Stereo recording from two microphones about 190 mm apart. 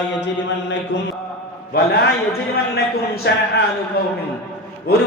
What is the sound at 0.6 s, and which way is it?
Speech, 65° left (ahead or behind).